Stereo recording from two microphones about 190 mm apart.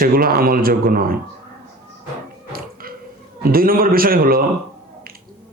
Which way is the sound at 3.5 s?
50° right (ahead or behind).